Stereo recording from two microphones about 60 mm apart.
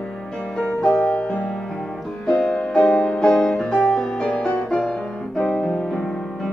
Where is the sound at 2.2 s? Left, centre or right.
Centre.